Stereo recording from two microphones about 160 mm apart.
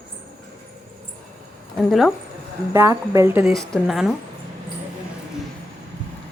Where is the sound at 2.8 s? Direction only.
15° right (ahead or behind).